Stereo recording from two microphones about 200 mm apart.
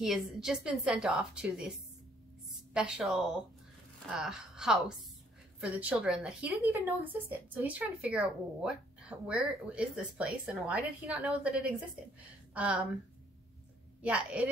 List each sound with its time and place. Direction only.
0.0 s speech: centre (ahead or behind)
2.7 s a woman's voice: 5° right (ahead or behind)
14.0 s a woman's voice: 5° right (ahead or behind)